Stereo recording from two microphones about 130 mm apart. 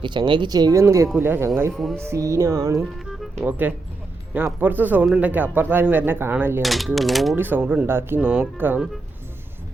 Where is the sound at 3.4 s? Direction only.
15° right (ahead or behind).